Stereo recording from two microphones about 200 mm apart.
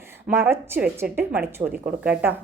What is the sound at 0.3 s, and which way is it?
Music, 10° right (ahead or behind).